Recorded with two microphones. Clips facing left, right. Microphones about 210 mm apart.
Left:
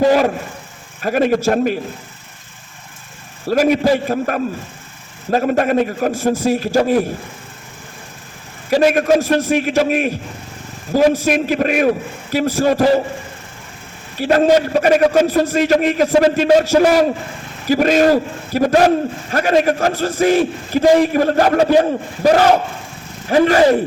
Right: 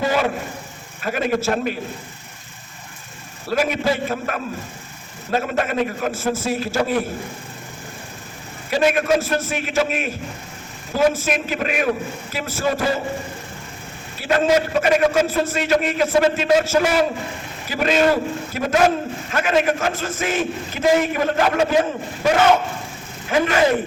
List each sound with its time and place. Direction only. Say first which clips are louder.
0.0 s a man's voice: left 7 dB; 40° left (ahead or behind)
3.4 s a man's voice: left 6 dB; 40° left (ahead or behind)
8.7 s a man's voice: left 5 dB; 40° left (ahead or behind)
14.2 s a man's voice: left 5 dB; 40° left (ahead or behind)